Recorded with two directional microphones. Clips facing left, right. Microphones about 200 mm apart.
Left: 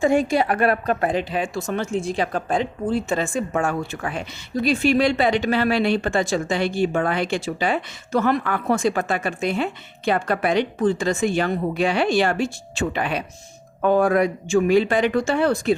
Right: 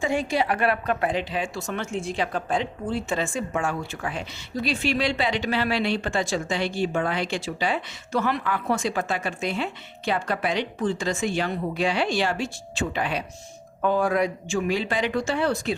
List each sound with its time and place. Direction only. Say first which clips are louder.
0.0 s speech: left 6 dB; 45° left (ahead or behind)